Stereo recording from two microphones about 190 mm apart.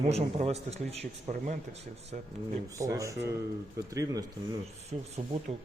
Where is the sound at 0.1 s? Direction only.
35° right (ahead or behind).